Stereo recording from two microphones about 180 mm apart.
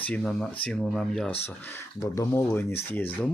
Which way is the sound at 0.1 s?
Centre (ahead or behind).